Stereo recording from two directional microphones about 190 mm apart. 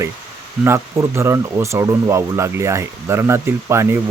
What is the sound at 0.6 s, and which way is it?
Speech, 15° right (ahead or behind).